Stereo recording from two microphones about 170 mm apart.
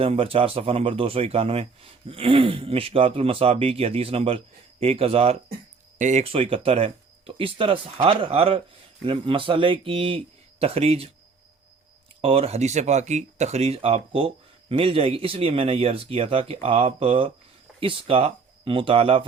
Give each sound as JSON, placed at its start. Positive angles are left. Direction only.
{"t": 0.0, "sound": "speech", "side_deg": -35}
{"t": 12.2, "sound": "speech", "side_deg": -35}